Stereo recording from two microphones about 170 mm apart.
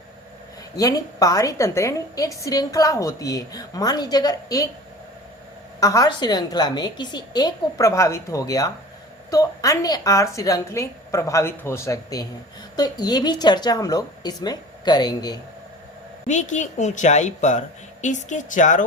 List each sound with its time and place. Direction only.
0.8 s a woman's voice: 20° left (ahead or behind)
5.8 s a woman's voice: 20° left (ahead or behind)
16.2 s a woman's voice: 45° left (ahead or behind)